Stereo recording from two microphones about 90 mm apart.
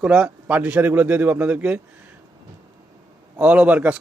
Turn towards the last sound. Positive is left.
turn(degrees=-15)  # may be behind; listen again after turning